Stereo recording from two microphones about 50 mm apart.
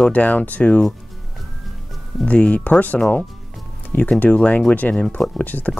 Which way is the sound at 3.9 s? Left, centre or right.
Left.